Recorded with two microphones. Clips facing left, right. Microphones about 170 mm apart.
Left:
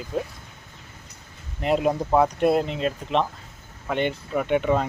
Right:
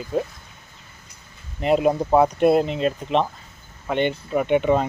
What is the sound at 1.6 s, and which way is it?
Speech, centre (ahead or behind).